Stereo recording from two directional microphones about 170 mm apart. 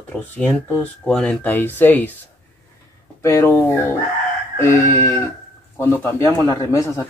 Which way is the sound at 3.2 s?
15° left (ahead or behind).